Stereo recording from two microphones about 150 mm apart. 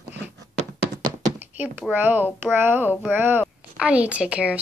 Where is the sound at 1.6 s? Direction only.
10° right (ahead or behind).